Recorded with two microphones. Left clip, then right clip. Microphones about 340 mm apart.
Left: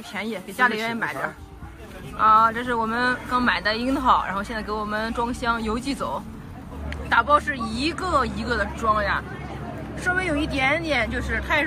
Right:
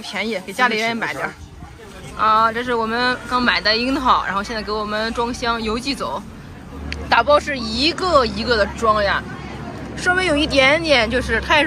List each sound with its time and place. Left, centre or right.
0.1 s speech: centre